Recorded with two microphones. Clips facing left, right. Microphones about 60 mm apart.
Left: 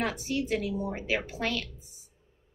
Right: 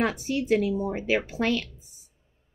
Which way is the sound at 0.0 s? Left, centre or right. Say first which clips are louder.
Right 4 dB; right.